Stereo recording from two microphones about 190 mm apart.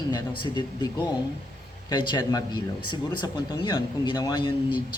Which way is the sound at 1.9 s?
20° left (ahead or behind).